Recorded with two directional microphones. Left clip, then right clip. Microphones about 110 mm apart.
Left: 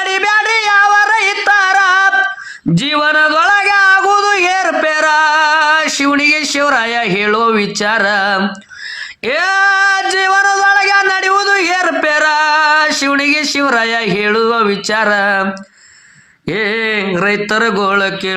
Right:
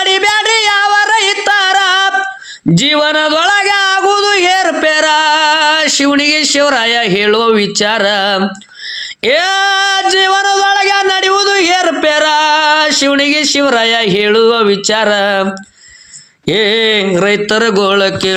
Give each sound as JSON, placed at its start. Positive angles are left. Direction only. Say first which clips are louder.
{"t": 0.0, "sound": "music", "louder": "right 2 dB", "side_deg": -20}
{"t": 2.7, "sound": "a sound", "louder": "right 1 dB", "side_deg": -25}
{"t": 16.5, "sound": "speech", "louder": "right 5 dB", "side_deg": -30}